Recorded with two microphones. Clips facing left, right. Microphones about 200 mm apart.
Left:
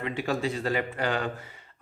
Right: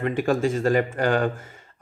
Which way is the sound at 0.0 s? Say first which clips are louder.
Right 7 dB; 50° right (ahead or behind).